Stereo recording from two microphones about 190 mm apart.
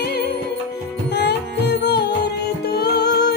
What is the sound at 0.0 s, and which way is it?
Music, 60° left (ahead or behind).